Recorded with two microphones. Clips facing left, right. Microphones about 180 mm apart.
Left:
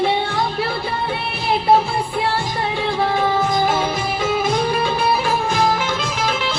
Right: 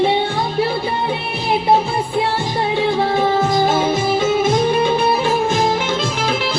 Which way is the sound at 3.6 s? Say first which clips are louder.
Right 4 dB; 25° right (ahead or behind).